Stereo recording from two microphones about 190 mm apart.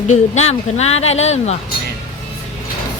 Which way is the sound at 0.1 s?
35° left (ahead or behind).